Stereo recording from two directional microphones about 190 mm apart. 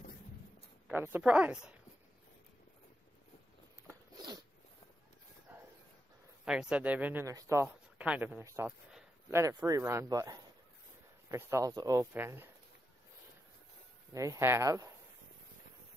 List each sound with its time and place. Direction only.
0.8 s speech: 10° right (ahead or behind)
5.5 s a sound: 10° right (ahead or behind)
6.4 s speech: 5° right (ahead or behind)
14.1 s speech: 15° right (ahead or behind)